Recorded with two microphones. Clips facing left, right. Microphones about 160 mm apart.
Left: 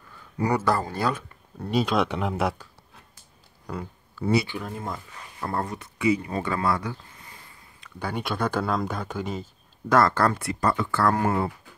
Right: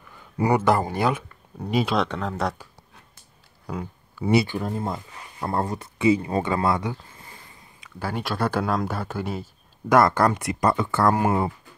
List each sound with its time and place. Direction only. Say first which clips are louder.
0.5 s speech: right 4 dB; 20° right (ahead or behind)
2.0 s speech: left 1 dB; 10° left (ahead or behind)
3.6 s a sound: right 2 dB; 10° right (ahead or behind)
4.5 s speech: right 5 dB; 35° right (ahead or behind)
7.8 s speech: right 1 dB; 5° right (ahead or behind); by 11.5 s 20° right (ahead or behind)